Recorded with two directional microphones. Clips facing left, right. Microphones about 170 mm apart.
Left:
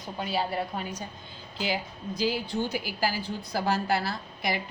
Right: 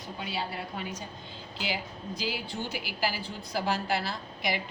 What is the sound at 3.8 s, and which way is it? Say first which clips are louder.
Speech: left 3 dB; 50° left (ahead or behind).